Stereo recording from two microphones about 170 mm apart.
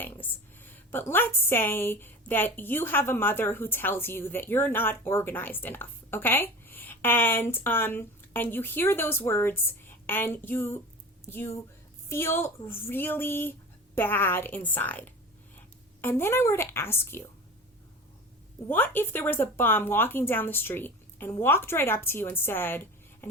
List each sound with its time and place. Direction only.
0.0 s a woman's voice: 10° left (ahead or behind)
18.7 s speech: 10° left (ahead or behind)
23.2 s a sound: 15° left (ahead or behind)